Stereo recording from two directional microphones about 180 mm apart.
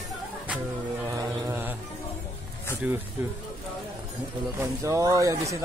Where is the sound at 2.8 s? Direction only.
10° right (ahead or behind).